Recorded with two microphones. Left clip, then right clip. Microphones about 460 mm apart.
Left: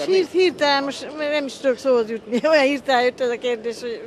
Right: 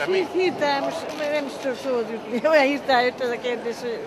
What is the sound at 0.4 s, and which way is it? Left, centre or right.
Speech, left.